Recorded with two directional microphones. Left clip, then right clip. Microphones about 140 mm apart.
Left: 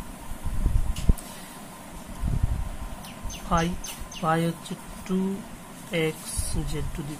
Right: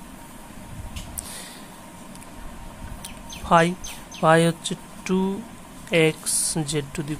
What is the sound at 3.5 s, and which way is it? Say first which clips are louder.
Speech: right 9 dB; 55° right (ahead or behind).